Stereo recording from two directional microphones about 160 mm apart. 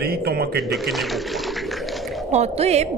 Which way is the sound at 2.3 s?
40° right (ahead or behind).